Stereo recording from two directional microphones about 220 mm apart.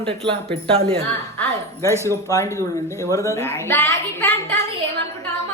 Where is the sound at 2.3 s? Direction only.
15° left (ahead or behind).